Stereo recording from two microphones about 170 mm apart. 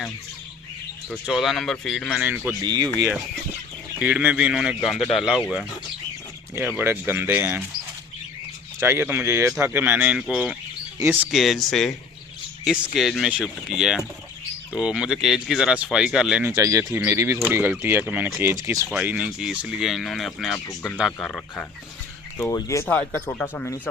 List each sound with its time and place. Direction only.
1.2 s speech: centre (ahead or behind)
2.6 s speech: 25° right (ahead or behind)
3.9 s speech: 10° right (ahead or behind)
6.7 s speech: 10° right (ahead or behind)
8.8 s speech: 15° right (ahead or behind)
11.3 s speech: centre (ahead or behind); by 18.9 s 15° right (ahead or behind)
18.9 s speech: 5° right (ahead or behind)